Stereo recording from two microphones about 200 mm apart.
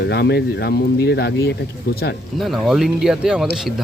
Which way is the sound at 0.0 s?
55° left (ahead or behind).